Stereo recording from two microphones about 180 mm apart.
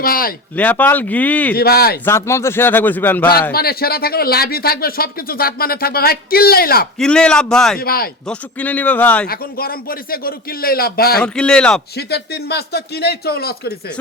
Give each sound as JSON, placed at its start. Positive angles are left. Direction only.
{"t": 0.0, "sound": "speech", "side_deg": 55}
{"t": 0.5, "sound": "a man's voice", "side_deg": 10}
{"t": 1.5, "sound": "speech", "side_deg": 60}
{"t": 2.0, "sound": "a man's voice", "side_deg": 15}
{"t": 3.5, "sound": "speech", "side_deg": 60}
{"t": 7.0, "sound": "speech", "side_deg": 5}
{"t": 7.8, "sound": "speech", "side_deg": 55}
{"t": 8.3, "sound": "a man's voice", "side_deg": 10}
{"t": 9.2, "sound": "speech", "side_deg": 55}
{"t": 11.2, "sound": "speech", "side_deg": 5}
{"t": 11.9, "sound": "speech", "side_deg": 65}